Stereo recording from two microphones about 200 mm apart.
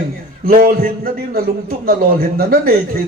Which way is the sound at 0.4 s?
45° right (ahead or behind).